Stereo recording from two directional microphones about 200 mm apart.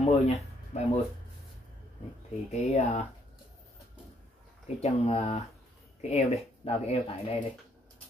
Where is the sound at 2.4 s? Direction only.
35° left (ahead or behind).